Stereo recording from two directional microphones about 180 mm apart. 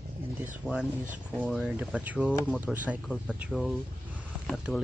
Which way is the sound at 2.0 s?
5° right (ahead or behind).